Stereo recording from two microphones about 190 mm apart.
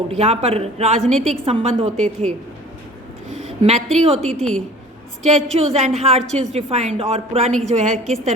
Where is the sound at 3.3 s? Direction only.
35° right (ahead or behind).